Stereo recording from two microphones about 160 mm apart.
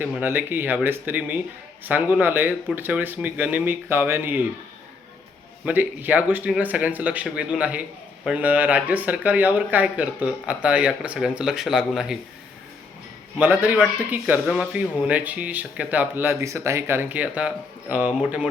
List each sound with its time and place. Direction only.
0.0 s a man's voice: 10° right (ahead or behind)
5.6 s a man's voice: 10° right (ahead or behind)
13.4 s a man's voice: 10° right (ahead or behind)